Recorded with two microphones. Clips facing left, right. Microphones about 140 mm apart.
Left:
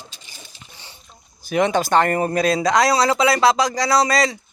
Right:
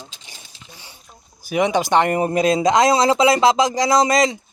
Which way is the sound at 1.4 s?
10° right (ahead or behind).